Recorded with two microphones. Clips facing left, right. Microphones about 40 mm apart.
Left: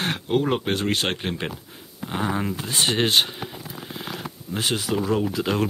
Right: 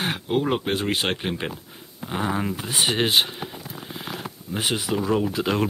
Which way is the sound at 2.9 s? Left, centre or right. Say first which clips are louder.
Even; centre.